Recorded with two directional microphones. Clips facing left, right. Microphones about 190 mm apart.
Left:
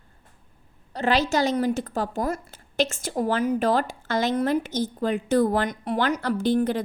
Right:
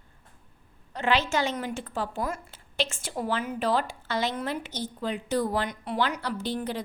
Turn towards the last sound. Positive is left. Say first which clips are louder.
# left 8 dB
turn(degrees=50)  # may be behind; listen again after turning